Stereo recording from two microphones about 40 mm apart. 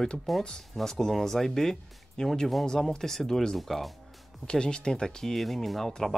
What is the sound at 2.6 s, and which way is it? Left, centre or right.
Speech, centre.